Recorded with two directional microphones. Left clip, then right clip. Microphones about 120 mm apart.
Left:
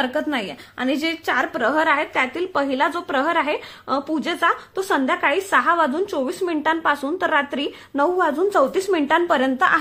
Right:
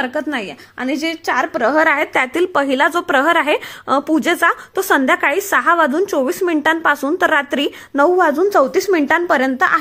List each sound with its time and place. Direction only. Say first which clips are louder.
0.0 s a woman's voice: right 2 dB; 15° right (ahead or behind)
1.8 s a woman's voice: right 5 dB; 50° right (ahead or behind)
2.1 s a woman's voice: right 6 dB; 65° right (ahead or behind); by 9.4 s 40° right (ahead or behind)
9.4 s a woman's voice: right 3 dB; 25° right (ahead or behind)